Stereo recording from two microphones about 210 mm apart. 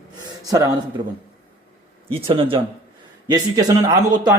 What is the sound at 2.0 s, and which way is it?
A man's voice, 25° right (ahead or behind).